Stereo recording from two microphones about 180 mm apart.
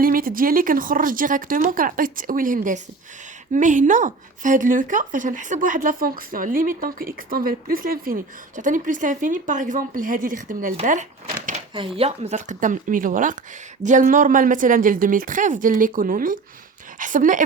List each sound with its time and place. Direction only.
0.0 s speech: 55° right (ahead or behind)
11.7 s speech: 30° right (ahead or behind); by 17.4 s 45° right (ahead or behind)